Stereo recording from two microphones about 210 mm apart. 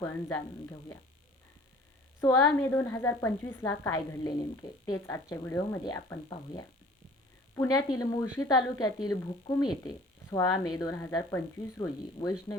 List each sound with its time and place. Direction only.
0.0 s speech: 10° left (ahead or behind)
2.2 s speech: 15° left (ahead or behind)
7.5 s speech: 15° left (ahead or behind)